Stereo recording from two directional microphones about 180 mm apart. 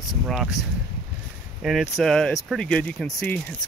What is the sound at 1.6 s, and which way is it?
Speech, centre (ahead or behind).